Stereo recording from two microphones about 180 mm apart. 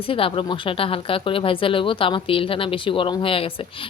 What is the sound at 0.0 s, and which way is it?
Speech, 30° left (ahead or behind).